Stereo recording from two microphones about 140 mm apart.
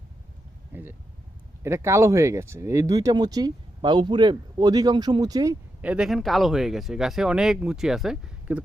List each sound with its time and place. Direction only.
0.7 s speech: 15° right (ahead or behind)
5.8 s speech: 5° right (ahead or behind)